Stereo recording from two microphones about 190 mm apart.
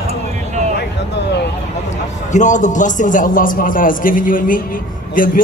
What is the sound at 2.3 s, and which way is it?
A man's voice, 40° left (ahead or behind).